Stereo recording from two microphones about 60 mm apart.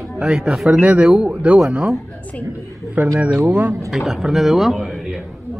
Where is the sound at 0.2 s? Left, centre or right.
Centre.